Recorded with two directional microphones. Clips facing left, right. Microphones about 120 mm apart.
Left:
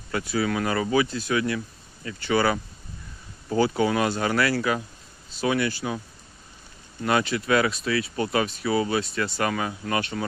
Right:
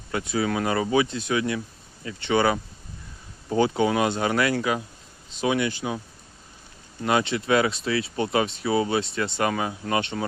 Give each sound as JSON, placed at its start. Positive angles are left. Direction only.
{"t": 0.1, "sound": "speech", "side_deg": -20}
{"t": 7.0, "sound": "speech", "side_deg": -20}